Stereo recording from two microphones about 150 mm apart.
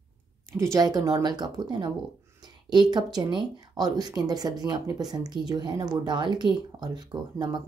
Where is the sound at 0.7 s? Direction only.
25° right (ahead or behind).